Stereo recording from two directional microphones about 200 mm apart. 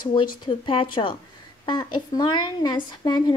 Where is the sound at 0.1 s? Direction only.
25° left (ahead or behind).